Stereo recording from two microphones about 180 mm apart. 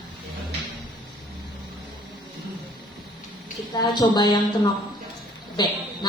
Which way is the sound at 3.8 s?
25° left (ahead or behind).